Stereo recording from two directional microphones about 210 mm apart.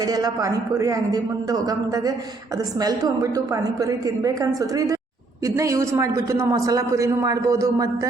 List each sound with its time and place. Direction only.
0.0 s a woman's voice: 20° right (ahead or behind)